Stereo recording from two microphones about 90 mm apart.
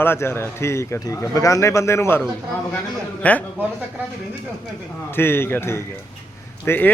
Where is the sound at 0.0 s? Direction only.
25° left (ahead or behind).